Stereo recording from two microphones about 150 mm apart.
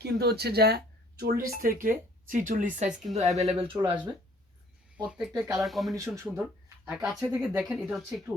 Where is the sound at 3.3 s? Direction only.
40° right (ahead or behind).